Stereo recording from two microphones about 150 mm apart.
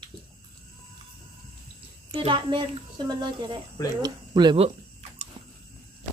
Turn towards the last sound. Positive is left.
turn(degrees=-30)  # may be behind; listen again after turning